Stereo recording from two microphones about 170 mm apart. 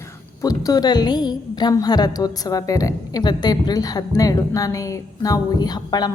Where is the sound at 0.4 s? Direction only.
20° left (ahead or behind).